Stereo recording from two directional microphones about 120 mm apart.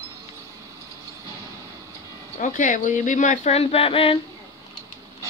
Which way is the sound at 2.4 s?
90° left.